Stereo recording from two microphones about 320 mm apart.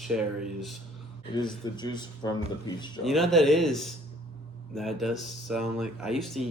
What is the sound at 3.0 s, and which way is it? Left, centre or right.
Mantra, centre.